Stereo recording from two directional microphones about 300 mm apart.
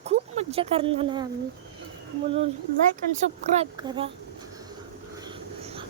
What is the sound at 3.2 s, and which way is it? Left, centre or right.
Speech, right.